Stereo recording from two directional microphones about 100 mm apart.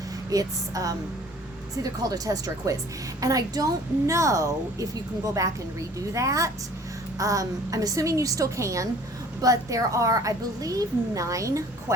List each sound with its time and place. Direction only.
0.3 s a woman's voice: 35° right (ahead or behind)